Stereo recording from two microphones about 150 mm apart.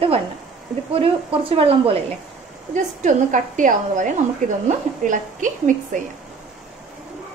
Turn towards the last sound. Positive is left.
turn(degrees=-60)  # may be behind; listen again after turning